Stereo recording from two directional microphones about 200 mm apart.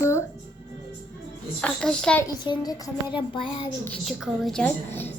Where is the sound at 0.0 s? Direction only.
15° left (ahead or behind).